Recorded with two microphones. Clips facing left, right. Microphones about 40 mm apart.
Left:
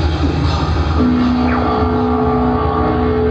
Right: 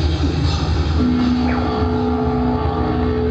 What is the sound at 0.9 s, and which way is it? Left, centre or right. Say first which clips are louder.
Music: left 3 dB; centre.